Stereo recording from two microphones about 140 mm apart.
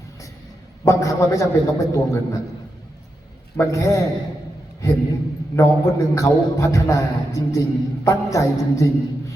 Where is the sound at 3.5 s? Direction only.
25° left (ahead or behind).